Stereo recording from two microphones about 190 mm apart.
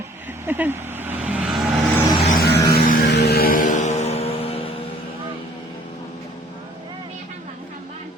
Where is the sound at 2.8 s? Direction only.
50° left (ahead or behind).